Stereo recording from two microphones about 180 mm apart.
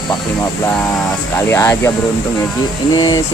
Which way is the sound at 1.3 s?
15° left (ahead or behind).